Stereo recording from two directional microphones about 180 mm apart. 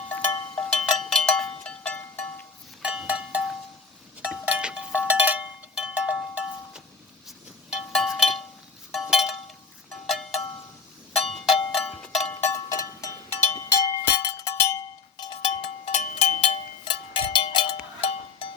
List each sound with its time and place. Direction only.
0.1 s cowbell: 10° left (ahead or behind)
0.8 s music: centre (ahead or behind)
2.8 s cowbell: 5° right (ahead or behind)
7.3 s music: centre (ahead or behind)
8.9 s a sound: centre (ahead or behind)
9.9 s cowbell: centre (ahead or behind)
11.3 s a sound: centre (ahead or behind)
12.3 s music: 15° left (ahead or behind)
15.6 s a sound: 40° left (ahead or behind)
16.8 s music: 25° left (ahead or behind)